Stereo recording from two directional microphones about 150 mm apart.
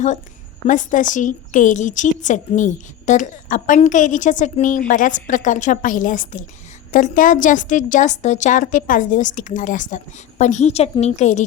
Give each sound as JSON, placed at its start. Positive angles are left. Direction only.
{"t": 0.7, "sound": "a woman's voice", "side_deg": 60}